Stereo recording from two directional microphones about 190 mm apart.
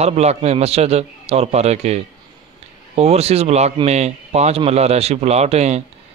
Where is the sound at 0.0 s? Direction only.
35° right (ahead or behind).